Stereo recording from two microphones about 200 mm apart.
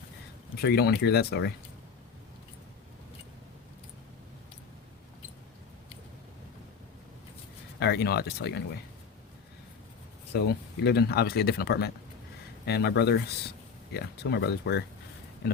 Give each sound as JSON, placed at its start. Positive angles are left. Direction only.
{"t": 0.6, "sound": "speech", "side_deg": 55}
{"t": 7.8, "sound": "speech", "side_deg": 55}
{"t": 10.3, "sound": "speech", "side_deg": 55}